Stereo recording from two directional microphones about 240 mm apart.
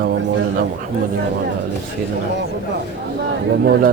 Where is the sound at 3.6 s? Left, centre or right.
Right.